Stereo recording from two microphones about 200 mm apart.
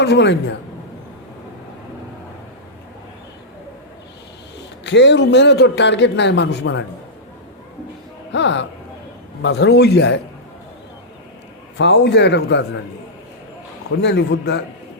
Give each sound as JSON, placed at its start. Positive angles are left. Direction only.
{"t": 0.0, "sound": "a man's voice", "side_deg": 60}
{"t": 4.8, "sound": "a man's voice", "side_deg": 60}
{"t": 8.3, "sound": "a man's voice", "side_deg": 65}
{"t": 11.8, "sound": "a man's voice", "side_deg": 60}
{"t": 14.0, "sound": "a man's voice", "side_deg": 60}